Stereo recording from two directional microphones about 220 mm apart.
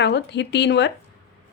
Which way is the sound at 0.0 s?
50° left (ahead or behind).